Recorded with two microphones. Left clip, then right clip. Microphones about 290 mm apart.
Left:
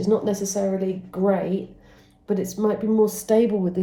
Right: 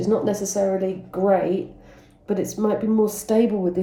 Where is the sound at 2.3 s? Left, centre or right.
Centre.